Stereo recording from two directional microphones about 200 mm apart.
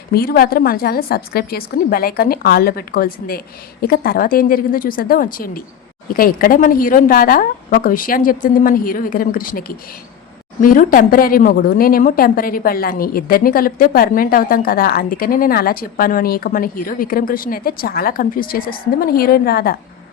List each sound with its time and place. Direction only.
0.1 s a woman's voice: 50° left (ahead or behind)